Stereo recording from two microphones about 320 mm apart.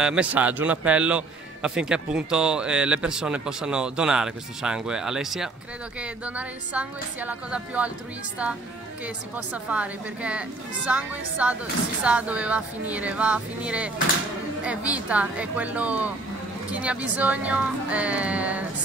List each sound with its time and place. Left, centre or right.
0.0 s a man's voice: centre
9.0 s a man's voice: centre